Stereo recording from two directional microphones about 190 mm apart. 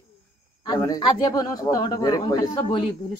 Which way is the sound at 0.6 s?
20° left (ahead or behind).